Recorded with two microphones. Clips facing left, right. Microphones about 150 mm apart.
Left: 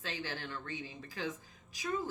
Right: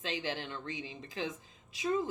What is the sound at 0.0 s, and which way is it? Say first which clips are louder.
Speech: right 4 dB; 20° right (ahead or behind).